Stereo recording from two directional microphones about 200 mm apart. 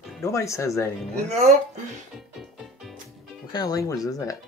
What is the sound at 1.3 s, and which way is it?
Speech, 35° right (ahead or behind).